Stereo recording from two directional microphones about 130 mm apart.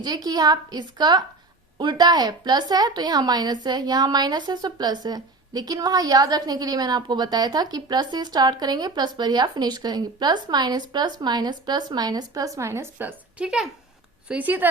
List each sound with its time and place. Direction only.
0.0 s a woman's voice: 30° right (ahead or behind); by 14.7 s 15° right (ahead or behind)